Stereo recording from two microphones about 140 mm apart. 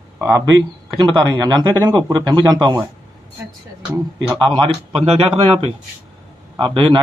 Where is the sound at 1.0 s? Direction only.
35° right (ahead or behind).